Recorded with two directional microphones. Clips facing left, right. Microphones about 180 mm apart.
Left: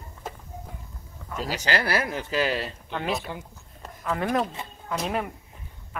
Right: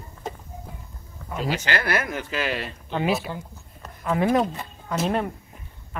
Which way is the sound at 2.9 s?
10° right (ahead or behind).